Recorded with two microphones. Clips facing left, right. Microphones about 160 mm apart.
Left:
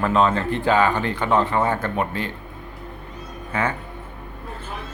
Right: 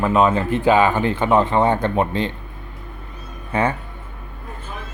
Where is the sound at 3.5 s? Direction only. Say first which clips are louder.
Right 4 dB; 30° right (ahead or behind).